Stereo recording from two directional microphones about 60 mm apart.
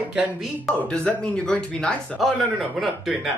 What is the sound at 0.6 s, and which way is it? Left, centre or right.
Speech, centre.